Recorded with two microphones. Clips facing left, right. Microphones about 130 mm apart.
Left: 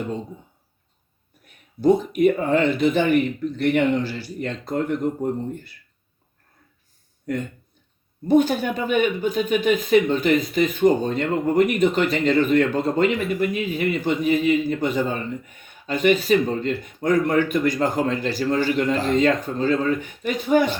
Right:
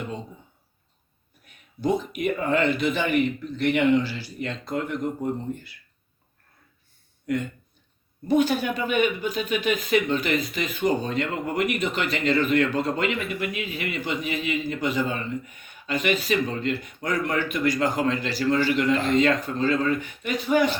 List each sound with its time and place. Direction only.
1.8 s speech: 50° left (ahead or behind)
8.3 s speech: 45° left (ahead or behind)